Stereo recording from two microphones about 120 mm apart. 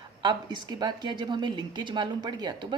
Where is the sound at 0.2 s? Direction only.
40° right (ahead or behind).